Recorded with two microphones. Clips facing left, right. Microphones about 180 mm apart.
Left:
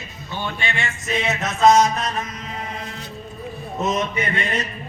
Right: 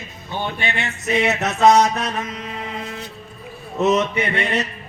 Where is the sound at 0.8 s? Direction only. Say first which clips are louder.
Right 8 dB; 65° right (ahead or behind).